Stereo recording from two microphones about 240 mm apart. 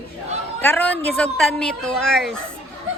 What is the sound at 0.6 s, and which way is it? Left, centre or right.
Speech, centre.